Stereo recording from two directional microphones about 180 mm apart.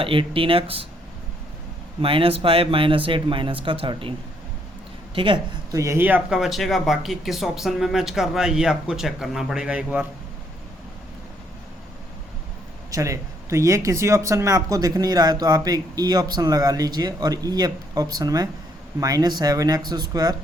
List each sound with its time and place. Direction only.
0.0 s speech: 30° right (ahead or behind)
2.0 s speech: 30° right (ahead or behind)
5.1 s speech: 30° right (ahead or behind)
5.7 s speech: 15° right (ahead or behind)
12.9 s speech: 15° right (ahead or behind)